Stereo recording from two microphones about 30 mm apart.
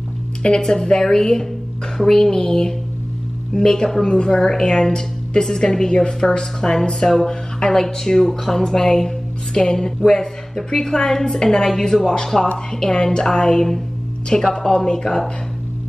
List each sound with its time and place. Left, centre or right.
0.4 s a woman's voice: left
4.5 s a woman's voice: centre